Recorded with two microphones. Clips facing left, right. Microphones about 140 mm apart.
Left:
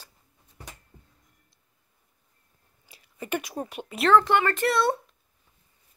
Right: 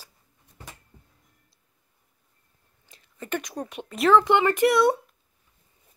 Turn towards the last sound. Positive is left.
turn(degrees=-15)  # may be behind; listen again after turning